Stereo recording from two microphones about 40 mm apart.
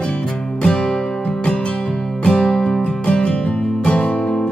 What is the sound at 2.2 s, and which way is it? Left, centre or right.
Music, left.